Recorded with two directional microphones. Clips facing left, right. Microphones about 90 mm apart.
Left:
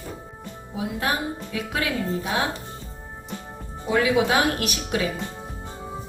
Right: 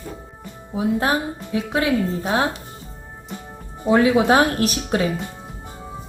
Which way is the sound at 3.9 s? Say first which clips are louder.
Right 5 dB; 35° right (ahead or behind).